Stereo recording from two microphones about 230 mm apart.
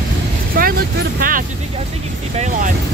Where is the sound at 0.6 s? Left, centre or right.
Right.